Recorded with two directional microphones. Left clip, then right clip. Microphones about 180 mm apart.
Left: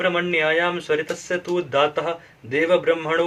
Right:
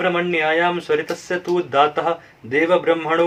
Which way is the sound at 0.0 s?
15° right (ahead or behind).